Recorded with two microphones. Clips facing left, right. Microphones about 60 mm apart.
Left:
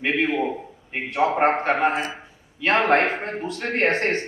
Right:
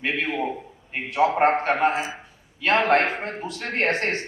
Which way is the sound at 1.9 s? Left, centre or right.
Left.